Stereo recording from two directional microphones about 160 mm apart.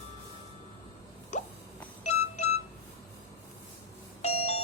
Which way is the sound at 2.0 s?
40° left (ahead or behind).